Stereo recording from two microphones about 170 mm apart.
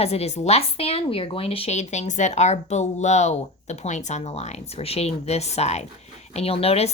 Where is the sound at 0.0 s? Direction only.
40° left (ahead or behind).